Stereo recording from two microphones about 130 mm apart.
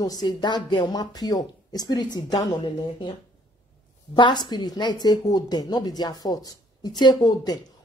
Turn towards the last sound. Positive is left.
turn(degrees=30)  # may be behind; listen again after turning